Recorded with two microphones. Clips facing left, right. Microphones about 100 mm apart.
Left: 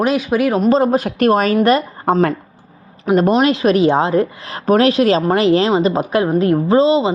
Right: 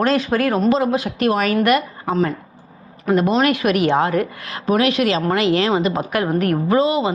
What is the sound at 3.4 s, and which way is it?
Speech, 25° left (ahead or behind).